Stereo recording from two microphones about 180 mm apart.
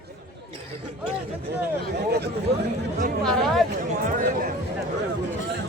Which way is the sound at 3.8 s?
50° right (ahead or behind).